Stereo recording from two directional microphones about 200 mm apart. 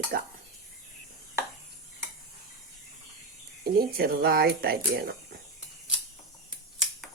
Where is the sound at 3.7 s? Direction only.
50° right (ahead or behind).